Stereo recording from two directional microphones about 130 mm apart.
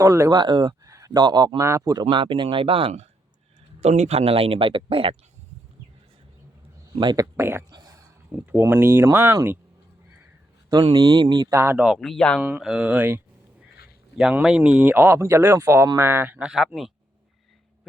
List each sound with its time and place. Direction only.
0.0 s speech: 25° right (ahead or behind)
0.3 s speech: 35° right (ahead or behind)
6.9 s speech: 35° right (ahead or behind)
7.3 s speech: 15° right (ahead or behind)
7.7 s a sound: 30° right (ahead or behind)
8.3 s speech: 15° right (ahead or behind)
10.8 s speech: 35° right (ahead or behind)
11.5 s speech: 20° right (ahead or behind)
11.8 s speech: centre (ahead or behind)
12.4 s speech: 10° right (ahead or behind)